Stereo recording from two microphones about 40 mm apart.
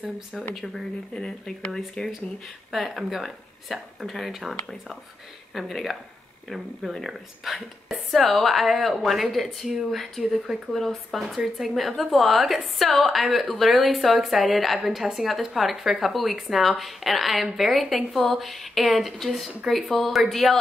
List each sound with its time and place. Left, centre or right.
1.1 s speech: centre
2.7 s a woman's voice: centre
10.7 s speech: centre
11.2 s a woman's voice: centre
15.0 s a woman's voice: centre